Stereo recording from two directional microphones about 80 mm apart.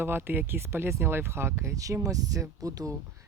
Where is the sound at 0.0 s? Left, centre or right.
Right.